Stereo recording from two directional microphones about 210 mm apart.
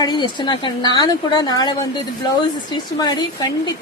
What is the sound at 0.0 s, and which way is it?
Speech, 20° left (ahead or behind).